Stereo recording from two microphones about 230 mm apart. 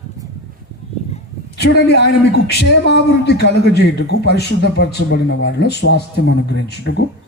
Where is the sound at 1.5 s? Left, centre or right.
Left.